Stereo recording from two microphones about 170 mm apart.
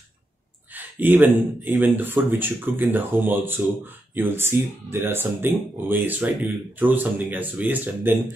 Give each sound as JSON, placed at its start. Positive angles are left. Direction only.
{"t": 0.7, "sound": "speech", "side_deg": -10}